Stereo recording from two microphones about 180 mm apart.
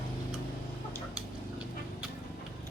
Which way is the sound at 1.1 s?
5° right (ahead or behind).